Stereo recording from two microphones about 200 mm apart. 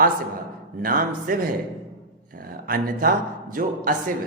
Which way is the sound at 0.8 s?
45° right (ahead or behind).